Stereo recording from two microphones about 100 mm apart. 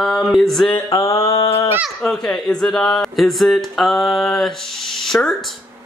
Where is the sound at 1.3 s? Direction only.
75° left (ahead or behind).